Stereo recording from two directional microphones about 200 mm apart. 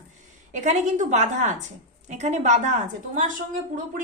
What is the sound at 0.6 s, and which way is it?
A woman's voice, 35° right (ahead or behind).